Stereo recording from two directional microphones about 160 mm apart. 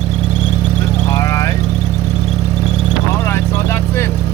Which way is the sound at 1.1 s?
20° left (ahead or behind).